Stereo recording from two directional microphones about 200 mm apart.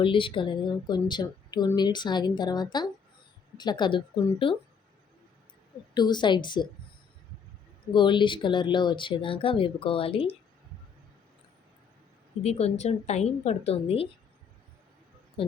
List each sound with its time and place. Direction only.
0.0 s speech: 25° left (ahead or behind)
5.9 s speech: 20° left (ahead or behind)
7.9 s speech: 25° left (ahead or behind)
12.4 s a woman's voice: 30° left (ahead or behind)
15.4 s a sound: 30° left (ahead or behind)